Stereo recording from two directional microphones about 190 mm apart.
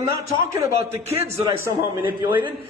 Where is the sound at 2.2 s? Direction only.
25° right (ahead or behind).